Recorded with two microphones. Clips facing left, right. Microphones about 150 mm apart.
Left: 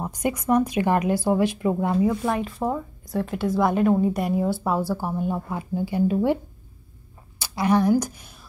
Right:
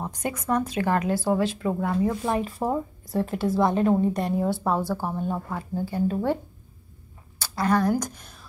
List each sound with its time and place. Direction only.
0.0 s speech: 10° left (ahead or behind)
2.3 s speech: 35° right (ahead or behind)
2.6 s a woman's voice: 5° right (ahead or behind); by 6.4 s 15° left (ahead or behind)
7.3 s a sound: 15° left (ahead or behind)
7.9 s a woman's voice: 5° left (ahead or behind)